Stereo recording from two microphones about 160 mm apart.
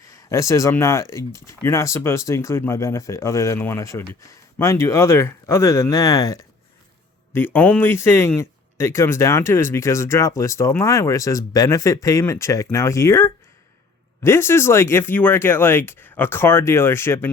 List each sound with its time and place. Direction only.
0.0 s speech: 20° left (ahead or behind)